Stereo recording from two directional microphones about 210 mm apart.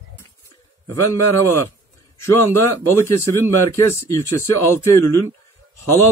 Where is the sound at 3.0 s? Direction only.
15° left (ahead or behind).